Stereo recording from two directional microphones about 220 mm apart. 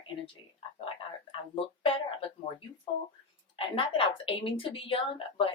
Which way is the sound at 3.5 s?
25° left (ahead or behind).